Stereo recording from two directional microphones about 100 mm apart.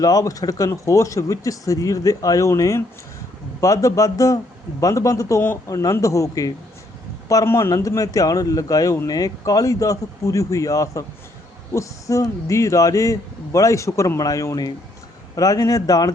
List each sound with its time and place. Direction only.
0.0 s speech: 35° left (ahead or behind)